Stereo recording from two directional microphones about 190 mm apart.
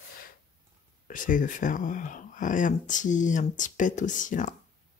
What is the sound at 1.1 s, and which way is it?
Speech, 45° left (ahead or behind).